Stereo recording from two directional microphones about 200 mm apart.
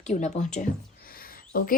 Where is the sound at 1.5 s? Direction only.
45° left (ahead or behind).